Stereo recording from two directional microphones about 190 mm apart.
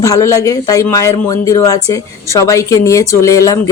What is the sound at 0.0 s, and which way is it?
Speech, 15° left (ahead or behind).